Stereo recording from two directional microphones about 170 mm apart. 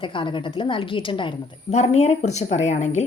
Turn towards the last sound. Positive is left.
turn(degrees=40)  # may be behind; listen again after turning